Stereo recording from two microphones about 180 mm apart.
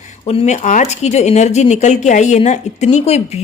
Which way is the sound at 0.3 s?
35° left (ahead or behind).